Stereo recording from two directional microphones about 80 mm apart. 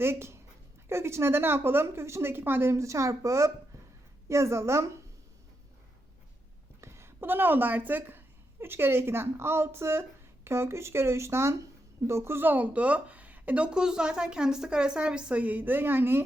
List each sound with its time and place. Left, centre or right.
0.0 s speech: right
6.8 s a woman's voice: right